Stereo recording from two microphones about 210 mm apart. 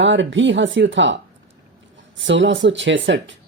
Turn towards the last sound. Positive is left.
turn(degrees=-60)  # may be behind; listen again after turning